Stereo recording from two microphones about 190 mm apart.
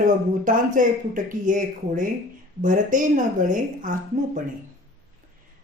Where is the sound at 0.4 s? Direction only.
45° right (ahead or behind).